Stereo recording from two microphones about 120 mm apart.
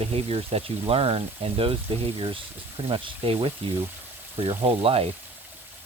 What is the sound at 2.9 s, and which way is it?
Speech, 45° right (ahead or behind).